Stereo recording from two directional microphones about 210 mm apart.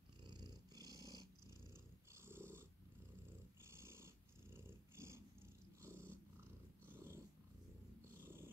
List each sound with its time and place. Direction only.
0.2 s purr: 20° right (ahead or behind)
2.2 s purr: 10° right (ahead or behind)
3.7 s purr: 10° right (ahead or behind)
8.2 s purr: 10° right (ahead or behind)